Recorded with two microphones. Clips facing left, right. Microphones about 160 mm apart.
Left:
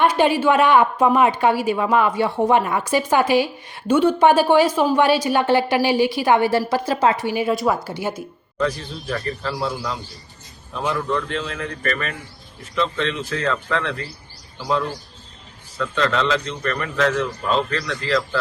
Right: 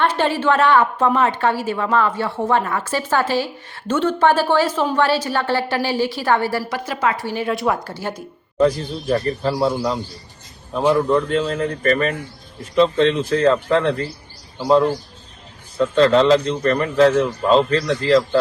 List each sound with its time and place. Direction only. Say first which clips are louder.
0.0 s a woman's voice: left 2 dB; 15° left (ahead or behind)
7.3 s a woman's voice: left 1 dB; 10° left (ahead or behind)
8.5 s a man's voice: right 6 dB; 30° right (ahead or behind)
10.8 s a man's voice: right 7 dB; 35° right (ahead or behind)